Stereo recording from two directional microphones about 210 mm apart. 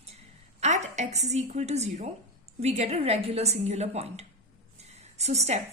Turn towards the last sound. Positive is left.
turn(degrees=-30)  # may be behind; listen again after turning